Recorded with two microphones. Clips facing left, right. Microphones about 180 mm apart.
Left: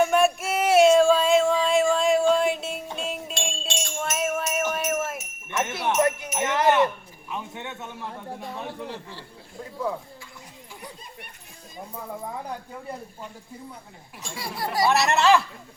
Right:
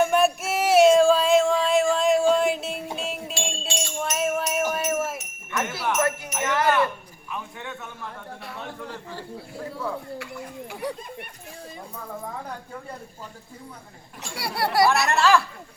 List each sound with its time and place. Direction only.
0.0 s a sound: centre (ahead or behind)
5.5 s jingle bell: 20° left (ahead or behind)
14.2 s speech: 70° right (ahead or behind)
15.0 s speech: 20° left (ahead or behind)